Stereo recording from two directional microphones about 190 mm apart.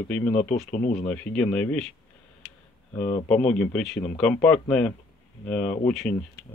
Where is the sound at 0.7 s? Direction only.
45° left (ahead or behind).